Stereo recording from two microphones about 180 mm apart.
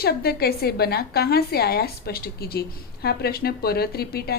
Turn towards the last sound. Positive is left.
turn(degrees=60)  # may be behind; listen again after turning